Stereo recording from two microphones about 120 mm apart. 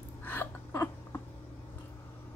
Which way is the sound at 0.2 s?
20° left (ahead or behind).